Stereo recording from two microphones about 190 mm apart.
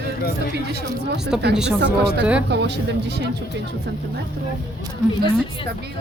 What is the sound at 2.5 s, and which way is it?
Speech, 60° right (ahead or behind).